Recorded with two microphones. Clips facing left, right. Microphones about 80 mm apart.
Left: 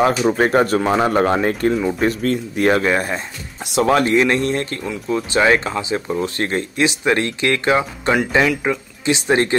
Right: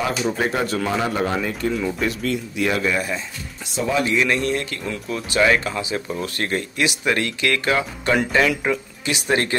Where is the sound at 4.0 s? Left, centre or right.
Left.